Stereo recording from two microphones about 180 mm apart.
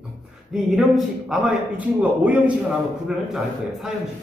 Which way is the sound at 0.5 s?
Centre (ahead or behind).